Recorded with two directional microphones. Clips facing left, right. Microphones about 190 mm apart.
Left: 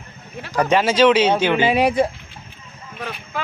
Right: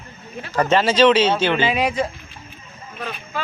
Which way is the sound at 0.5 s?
10° left (ahead or behind).